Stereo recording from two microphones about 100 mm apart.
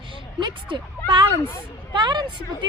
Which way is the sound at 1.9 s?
50° right (ahead or behind).